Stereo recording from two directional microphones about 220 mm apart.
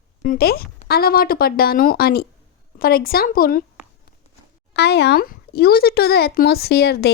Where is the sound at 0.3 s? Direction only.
45° left (ahead or behind).